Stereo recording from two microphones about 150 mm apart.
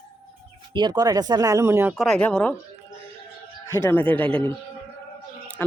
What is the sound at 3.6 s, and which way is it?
Speech, 15° left (ahead or behind).